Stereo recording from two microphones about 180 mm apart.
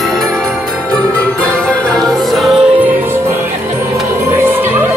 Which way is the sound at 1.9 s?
Centre (ahead or behind).